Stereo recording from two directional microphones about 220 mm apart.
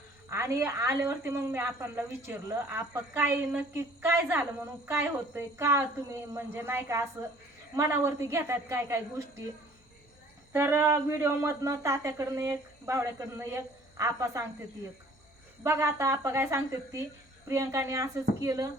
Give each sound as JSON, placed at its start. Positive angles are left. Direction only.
{"t": 0.3, "sound": "a woman's voice", "side_deg": -10}
{"t": 10.5, "sound": "a woman's voice", "side_deg": -10}
{"t": 15.6, "sound": "a woman's voice", "side_deg": -10}